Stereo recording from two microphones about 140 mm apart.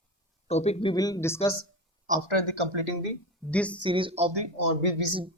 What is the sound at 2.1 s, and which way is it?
Speech, 65° right (ahead or behind).